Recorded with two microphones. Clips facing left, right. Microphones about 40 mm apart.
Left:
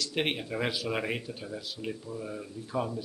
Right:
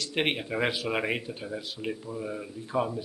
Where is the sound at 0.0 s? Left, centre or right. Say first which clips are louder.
Right 2 dB; centre.